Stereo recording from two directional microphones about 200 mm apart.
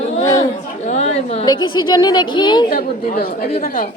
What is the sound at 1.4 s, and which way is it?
A woman's voice, 20° left (ahead or behind).